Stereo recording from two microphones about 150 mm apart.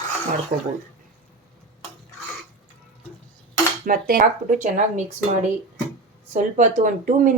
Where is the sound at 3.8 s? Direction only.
65° right (ahead or behind).